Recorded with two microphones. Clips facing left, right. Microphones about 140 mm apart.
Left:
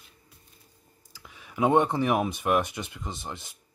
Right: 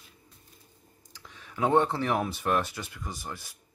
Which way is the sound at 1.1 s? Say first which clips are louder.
Left 1 dB; 10° left (ahead or behind).